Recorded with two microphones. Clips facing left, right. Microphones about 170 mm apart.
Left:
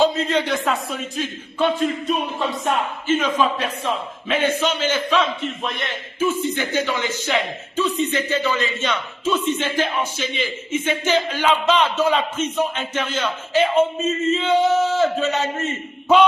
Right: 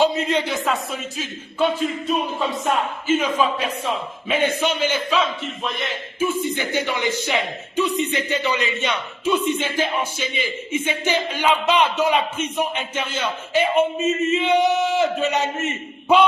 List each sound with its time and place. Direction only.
0.0 s speech: 10° right (ahead or behind)
5.1 s speech: centre (ahead or behind)
6.1 s speech: 10° right (ahead or behind)